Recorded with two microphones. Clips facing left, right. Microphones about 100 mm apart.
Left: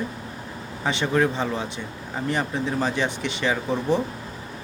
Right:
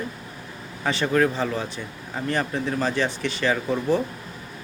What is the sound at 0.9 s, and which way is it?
Speech, 20° left (ahead or behind).